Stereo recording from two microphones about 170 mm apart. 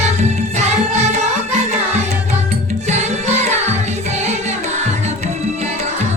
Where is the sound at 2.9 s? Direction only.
40° right (ahead or behind).